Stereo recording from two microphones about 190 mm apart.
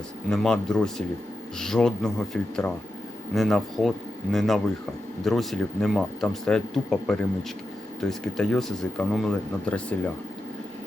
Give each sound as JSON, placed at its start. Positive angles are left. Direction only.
{"t": 0.3, "sound": "speech", "side_deg": 5}